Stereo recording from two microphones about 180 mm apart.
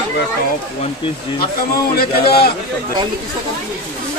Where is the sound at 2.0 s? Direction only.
60° left (ahead or behind).